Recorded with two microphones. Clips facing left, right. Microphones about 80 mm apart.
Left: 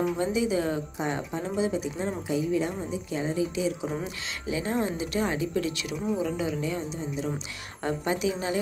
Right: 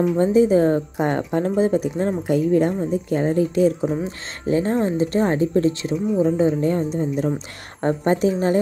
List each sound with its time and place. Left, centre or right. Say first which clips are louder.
0.2 s a woman's voice: right 11 dB; right